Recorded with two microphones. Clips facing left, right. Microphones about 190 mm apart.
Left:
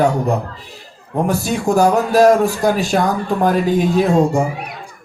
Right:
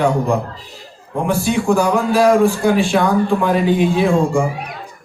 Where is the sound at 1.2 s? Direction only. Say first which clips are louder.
Right 2 dB; 40° left (ahead or behind).